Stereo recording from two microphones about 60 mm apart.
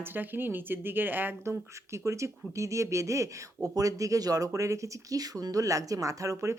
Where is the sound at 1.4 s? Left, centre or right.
Right.